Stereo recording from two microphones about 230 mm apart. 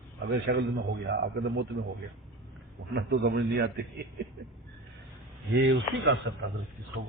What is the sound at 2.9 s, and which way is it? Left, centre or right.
A man's voice, right.